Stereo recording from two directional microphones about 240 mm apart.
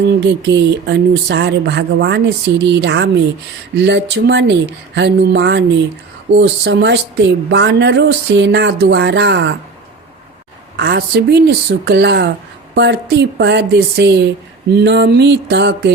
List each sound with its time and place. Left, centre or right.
0.1 s speech: right
10.8 s speech: right